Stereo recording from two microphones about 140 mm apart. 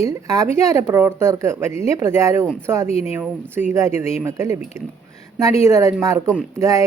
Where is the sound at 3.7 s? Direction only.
20° right (ahead or behind).